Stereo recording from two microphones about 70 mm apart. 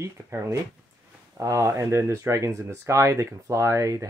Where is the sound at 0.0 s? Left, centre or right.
Right.